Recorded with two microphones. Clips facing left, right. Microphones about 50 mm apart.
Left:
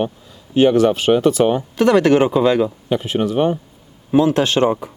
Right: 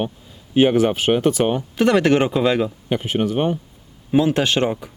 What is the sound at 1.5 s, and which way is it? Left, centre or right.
Speech, centre.